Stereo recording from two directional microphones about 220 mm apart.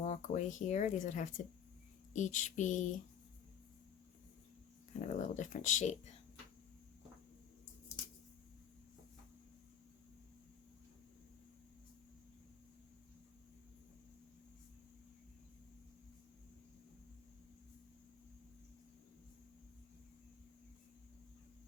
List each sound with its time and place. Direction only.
0.0 s speech: 35° left (ahead or behind)
4.9 s speech: 35° left (ahead or behind)